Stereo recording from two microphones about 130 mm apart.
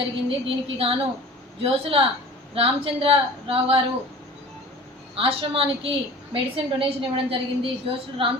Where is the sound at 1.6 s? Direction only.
45° right (ahead or behind).